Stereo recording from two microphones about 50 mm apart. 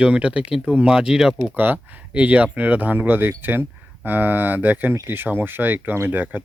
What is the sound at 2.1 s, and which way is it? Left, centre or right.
Speech, right.